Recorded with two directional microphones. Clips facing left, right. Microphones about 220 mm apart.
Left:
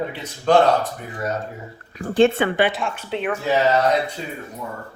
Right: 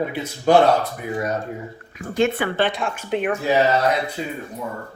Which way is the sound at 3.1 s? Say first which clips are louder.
Right 4 dB; 15° right (ahead or behind).